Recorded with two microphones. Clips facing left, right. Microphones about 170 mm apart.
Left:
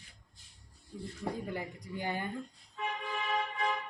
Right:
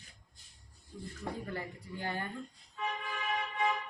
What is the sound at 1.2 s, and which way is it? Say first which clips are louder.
Speech: left 2 dB; 15° left (ahead or behind).